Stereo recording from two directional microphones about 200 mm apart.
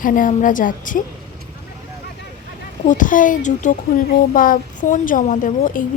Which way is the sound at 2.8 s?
40° left (ahead or behind).